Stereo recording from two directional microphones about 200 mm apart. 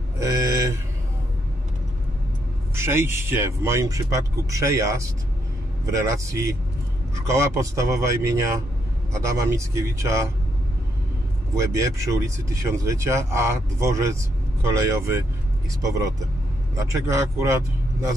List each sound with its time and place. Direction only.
0.2 s a sound: 15° right (ahead or behind)
2.7 s speech: 10° right (ahead or behind)
11.5 s speech: 15° right (ahead or behind)